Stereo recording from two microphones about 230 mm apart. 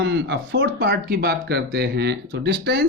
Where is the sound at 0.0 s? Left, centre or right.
Right.